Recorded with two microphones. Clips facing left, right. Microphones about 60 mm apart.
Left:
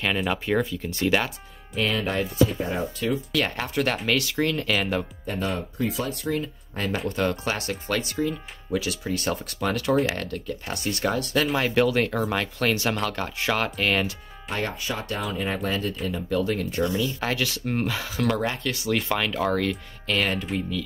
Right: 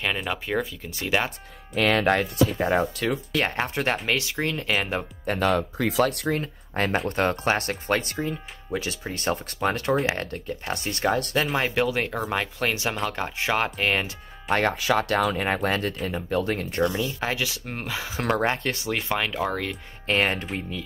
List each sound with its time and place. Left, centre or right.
0.0 s speech: centre
1.8 s speech: right
3.3 s speech: right
5.2 s speech: right
6.3 s speech: right
11.7 s speech: centre
14.5 s speech: right
14.8 s speech: right
15.4 s speech: right
17.2 s speech: centre
18.1 s speech: right
18.9 s speech: centre
20.1 s speech: right